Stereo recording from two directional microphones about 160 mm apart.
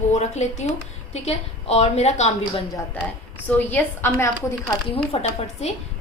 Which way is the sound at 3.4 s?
10° left (ahead or behind).